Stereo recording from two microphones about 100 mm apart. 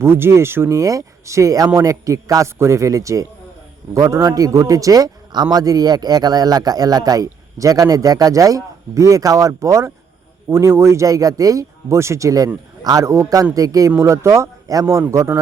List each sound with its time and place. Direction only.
0.0 s a man's voice: 25° right (ahead or behind)